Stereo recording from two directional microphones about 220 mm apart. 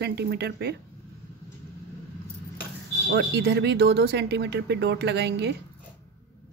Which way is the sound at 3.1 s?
50° right (ahead or behind).